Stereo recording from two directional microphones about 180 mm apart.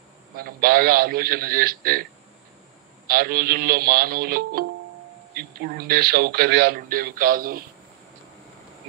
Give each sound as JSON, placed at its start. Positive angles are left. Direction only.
{"t": 0.4, "sound": "speech", "side_deg": -55}
{"t": 3.1, "sound": "speech", "side_deg": -55}